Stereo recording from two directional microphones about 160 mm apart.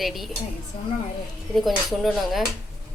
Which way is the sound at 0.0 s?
Centre (ahead or behind).